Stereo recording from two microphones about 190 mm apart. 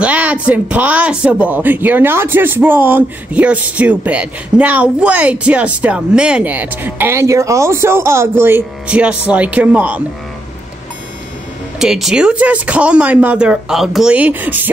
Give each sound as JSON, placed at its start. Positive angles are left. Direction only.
{"t": 0.0, "sound": "speech", "side_deg": -5}
{"t": 11.8, "sound": "speech", "side_deg": 0}